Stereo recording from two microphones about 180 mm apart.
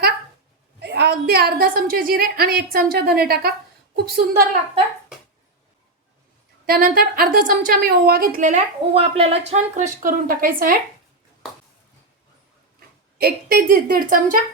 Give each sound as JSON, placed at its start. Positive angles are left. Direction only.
{"t": 0.8, "sound": "a woman's voice", "side_deg": -65}
{"t": 6.7, "sound": "a woman's voice", "side_deg": -55}
{"t": 13.1, "sound": "a woman's voice", "side_deg": -55}